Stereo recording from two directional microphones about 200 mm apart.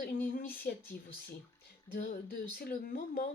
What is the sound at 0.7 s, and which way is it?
Speech, 50° left (ahead or behind).